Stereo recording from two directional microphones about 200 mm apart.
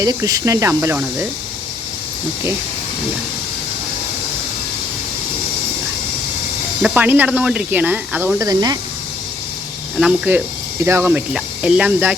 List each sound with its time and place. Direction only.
0.0 s speech: 20° right (ahead or behind)
6.8 s speech: 10° right (ahead or behind)
10.0 s speech: 5° right (ahead or behind)